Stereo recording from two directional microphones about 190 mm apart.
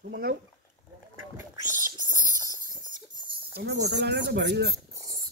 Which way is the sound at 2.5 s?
20° left (ahead or behind).